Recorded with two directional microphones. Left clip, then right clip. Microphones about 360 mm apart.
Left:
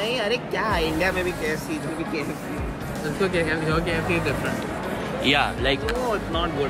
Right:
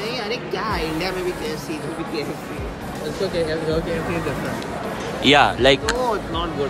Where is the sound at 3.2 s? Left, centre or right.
Left.